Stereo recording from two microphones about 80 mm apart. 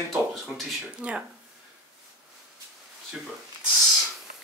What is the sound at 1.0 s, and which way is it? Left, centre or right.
Speech, centre.